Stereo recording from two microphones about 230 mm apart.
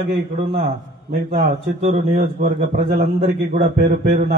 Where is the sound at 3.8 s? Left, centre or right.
Right.